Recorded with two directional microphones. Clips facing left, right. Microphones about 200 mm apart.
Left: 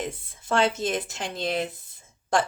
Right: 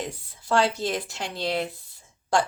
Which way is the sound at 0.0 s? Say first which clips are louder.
Left 1 dB; 20° left (ahead or behind).